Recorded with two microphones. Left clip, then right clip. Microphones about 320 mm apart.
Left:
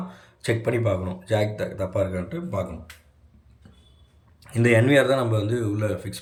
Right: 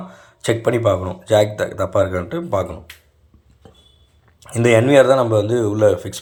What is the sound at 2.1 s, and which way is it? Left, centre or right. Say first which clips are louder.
Speech: right 10 dB; right.